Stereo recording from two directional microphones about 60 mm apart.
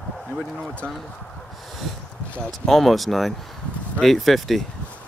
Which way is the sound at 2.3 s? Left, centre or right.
Centre.